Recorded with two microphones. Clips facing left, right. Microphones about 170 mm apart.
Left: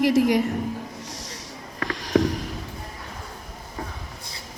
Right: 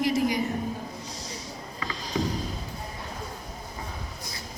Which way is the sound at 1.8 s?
80° left.